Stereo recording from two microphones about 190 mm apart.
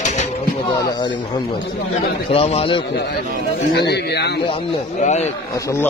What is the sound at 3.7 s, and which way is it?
Speech, 60° left (ahead or behind).